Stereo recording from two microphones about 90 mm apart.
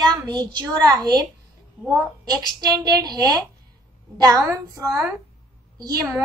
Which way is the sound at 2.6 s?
45° right (ahead or behind).